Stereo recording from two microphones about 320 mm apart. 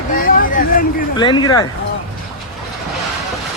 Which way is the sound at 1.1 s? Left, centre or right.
Centre.